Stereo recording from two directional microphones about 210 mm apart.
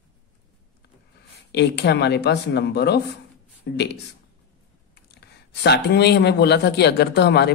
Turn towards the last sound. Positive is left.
turn(degrees=50)  # may be behind; listen again after turning